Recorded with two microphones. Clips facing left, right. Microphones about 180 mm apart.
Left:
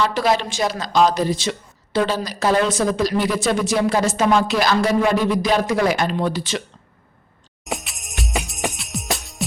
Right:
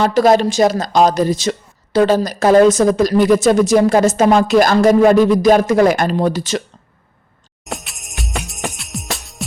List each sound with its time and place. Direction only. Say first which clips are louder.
0.0 s speech: right 7 dB; 45° right (ahead or behind)
7.6 s jingle bell: even; centre (ahead or behind)